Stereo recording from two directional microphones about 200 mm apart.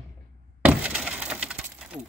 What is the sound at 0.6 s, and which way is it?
Glass, 5° right (ahead or behind).